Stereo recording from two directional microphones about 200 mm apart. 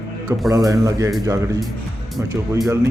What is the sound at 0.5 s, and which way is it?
Speech, 15° right (ahead or behind).